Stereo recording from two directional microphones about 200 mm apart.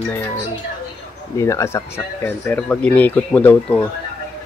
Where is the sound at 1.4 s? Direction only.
15° left (ahead or behind).